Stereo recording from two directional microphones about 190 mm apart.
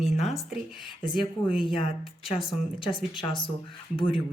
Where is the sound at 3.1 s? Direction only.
25° left (ahead or behind).